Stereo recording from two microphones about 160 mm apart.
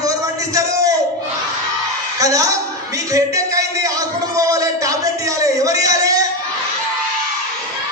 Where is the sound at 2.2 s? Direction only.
20° right (ahead or behind).